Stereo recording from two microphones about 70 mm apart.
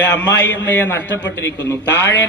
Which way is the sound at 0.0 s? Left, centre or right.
Left.